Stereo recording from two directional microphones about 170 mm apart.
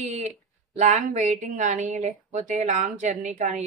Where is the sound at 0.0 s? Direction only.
40° right (ahead or behind).